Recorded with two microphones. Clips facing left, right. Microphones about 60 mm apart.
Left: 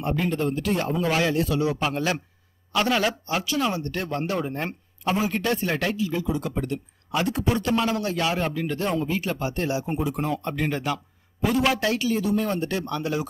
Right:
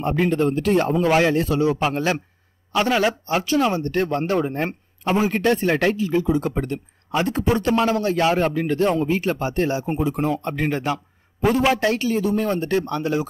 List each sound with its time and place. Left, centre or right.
0.0 s a man's voice: right
2.7 s a man's voice: centre
3.1 s a man's voice: right
5.3 s a man's voice: right